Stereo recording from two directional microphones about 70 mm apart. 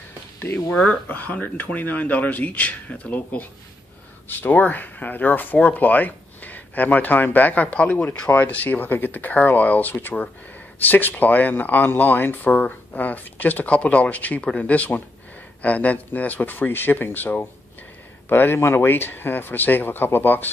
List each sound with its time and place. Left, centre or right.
0.7 s speech: centre